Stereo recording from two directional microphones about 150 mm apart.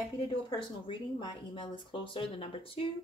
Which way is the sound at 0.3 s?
35° left (ahead or behind).